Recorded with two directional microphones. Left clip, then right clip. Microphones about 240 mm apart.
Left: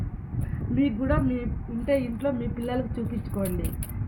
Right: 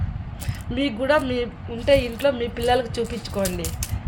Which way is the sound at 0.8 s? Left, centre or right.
Right.